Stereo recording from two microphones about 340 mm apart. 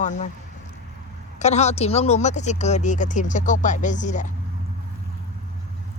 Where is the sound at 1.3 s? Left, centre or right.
Centre.